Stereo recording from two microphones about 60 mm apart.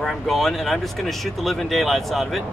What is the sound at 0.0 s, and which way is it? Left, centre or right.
Speech, centre.